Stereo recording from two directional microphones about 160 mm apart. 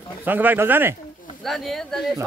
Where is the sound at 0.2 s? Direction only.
10° right (ahead or behind).